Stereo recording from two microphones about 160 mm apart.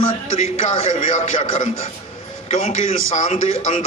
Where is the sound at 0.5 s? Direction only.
45° left (ahead or behind).